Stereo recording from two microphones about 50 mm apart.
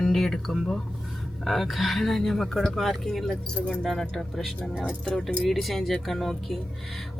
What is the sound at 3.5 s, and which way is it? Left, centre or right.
Speech, left.